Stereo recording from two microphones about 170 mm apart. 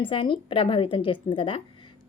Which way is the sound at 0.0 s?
30° left (ahead or behind).